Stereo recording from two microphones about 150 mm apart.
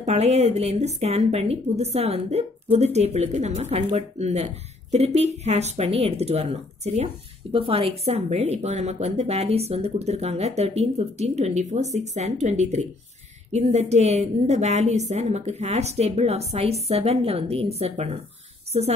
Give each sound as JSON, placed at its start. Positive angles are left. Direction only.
{"t": 0.0, "sound": "a woman's voice", "side_deg": -45}